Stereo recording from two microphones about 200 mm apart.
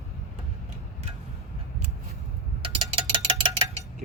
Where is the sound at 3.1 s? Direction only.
25° right (ahead or behind).